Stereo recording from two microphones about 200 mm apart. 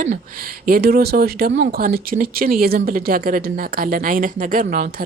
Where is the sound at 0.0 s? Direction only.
40° right (ahead or behind).